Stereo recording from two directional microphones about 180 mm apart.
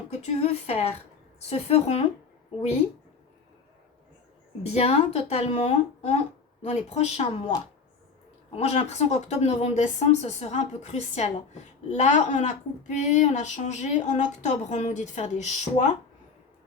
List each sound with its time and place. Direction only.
0.1 s speech: 35° left (ahead or behind)
4.6 s speech: 35° left (ahead or behind)
8.5 s speech: 35° left (ahead or behind)